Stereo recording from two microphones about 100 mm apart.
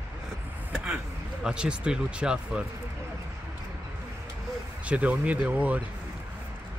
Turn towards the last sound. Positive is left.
turn(degrees=-15)  # may be behind; listen again after turning